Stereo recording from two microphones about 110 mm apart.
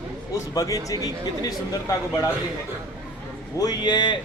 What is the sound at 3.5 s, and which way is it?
Speech, 35° left (ahead or behind).